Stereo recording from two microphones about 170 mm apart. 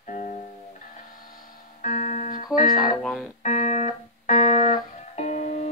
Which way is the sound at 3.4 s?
45° left (ahead or behind).